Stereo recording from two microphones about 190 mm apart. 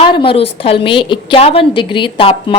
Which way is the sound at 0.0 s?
25° left (ahead or behind).